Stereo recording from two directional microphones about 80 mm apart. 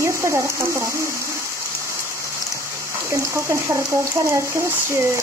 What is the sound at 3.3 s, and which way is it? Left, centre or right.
Speech, right.